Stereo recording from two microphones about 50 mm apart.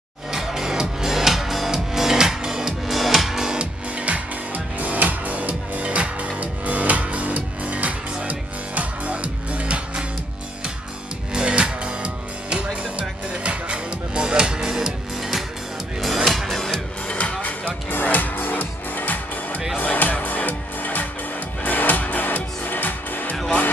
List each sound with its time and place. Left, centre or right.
0.3 s music: centre
3.5 s music: right
11.3 s music: right; by 16.8 s centre
17.1 s music: left